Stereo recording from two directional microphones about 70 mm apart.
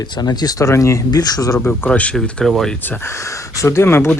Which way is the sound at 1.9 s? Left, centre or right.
Centre.